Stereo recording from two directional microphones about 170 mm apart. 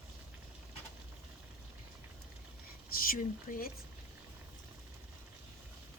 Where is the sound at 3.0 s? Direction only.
60° left (ahead or behind).